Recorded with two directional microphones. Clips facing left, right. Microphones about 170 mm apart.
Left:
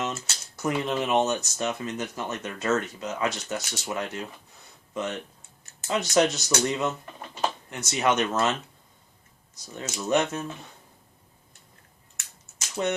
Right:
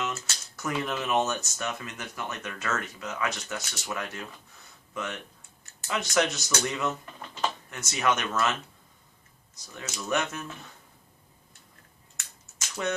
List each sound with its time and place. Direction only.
0.0 s speech: 20° left (ahead or behind)
5.9 s speech: 25° left (ahead or behind)
7.9 s speech: 25° left (ahead or behind)
9.7 s speech: 25° left (ahead or behind)
12.8 s speech: 25° left (ahead or behind)